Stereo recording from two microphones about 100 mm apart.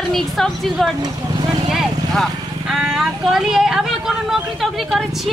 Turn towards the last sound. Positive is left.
turn(degrees=0)  # may be behind; listen again after turning